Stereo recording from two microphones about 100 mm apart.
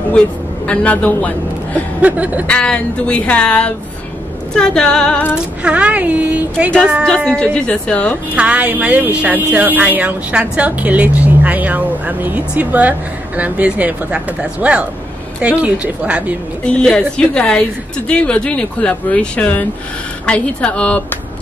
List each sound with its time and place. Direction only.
0.7 s a woman's voice: 15° left (ahead or behind)
2.0 s speech: 15° right (ahead or behind)
2.4 s a woman's voice: 10° left (ahead or behind)
5.6 s speech: 10° right (ahead or behind)
7.2 s a woman's voice: 10° left (ahead or behind)
8.4 s speech: 15° right (ahead or behind)
16.6 s a woman's voice: 10° left (ahead or behind)